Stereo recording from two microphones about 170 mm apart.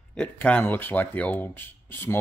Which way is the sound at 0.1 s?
5° left (ahead or behind).